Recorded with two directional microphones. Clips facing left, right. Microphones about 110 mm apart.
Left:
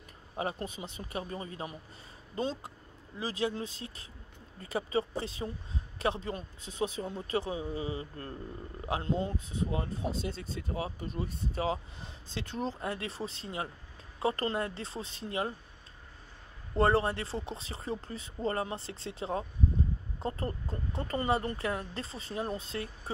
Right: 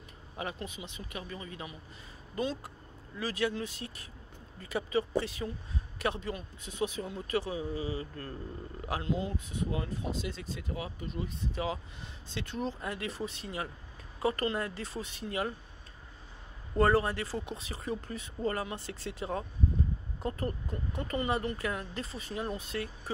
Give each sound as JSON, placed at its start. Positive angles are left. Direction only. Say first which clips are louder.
{"t": 0.4, "sound": "speech", "louder": "left 3 dB", "side_deg": 40}
{"t": 3.2, "sound": "speech", "louder": "right 1 dB", "side_deg": 25}
{"t": 16.7, "sound": "speech", "louder": "even", "side_deg": 30}